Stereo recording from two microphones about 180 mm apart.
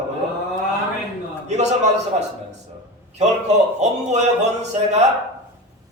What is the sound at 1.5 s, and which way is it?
Speech, 40° right (ahead or behind).